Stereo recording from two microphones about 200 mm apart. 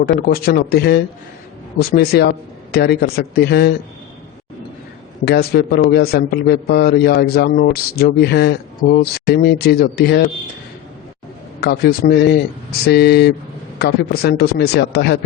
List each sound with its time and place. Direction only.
0.0 s a man's voice: 50° left (ahead or behind)
5.2 s a man's voice: 50° left (ahead or behind)
11.6 s a man's voice: 50° left (ahead or behind)